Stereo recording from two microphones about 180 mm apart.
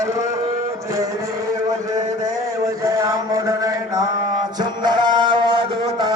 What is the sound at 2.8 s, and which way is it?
Chant, 20° right (ahead or behind).